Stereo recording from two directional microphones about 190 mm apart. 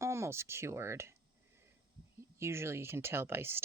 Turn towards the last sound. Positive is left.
turn(degrees=-10)  # may be behind; listen again after turning